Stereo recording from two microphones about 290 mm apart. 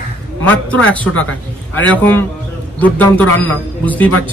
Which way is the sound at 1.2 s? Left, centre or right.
Left.